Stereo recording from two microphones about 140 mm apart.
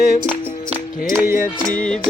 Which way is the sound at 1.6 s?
5° left (ahead or behind).